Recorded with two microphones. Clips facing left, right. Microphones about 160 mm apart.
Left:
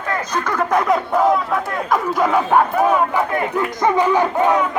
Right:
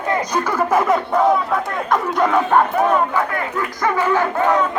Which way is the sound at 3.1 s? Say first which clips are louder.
Left 2 dB; 20° left (ahead or behind).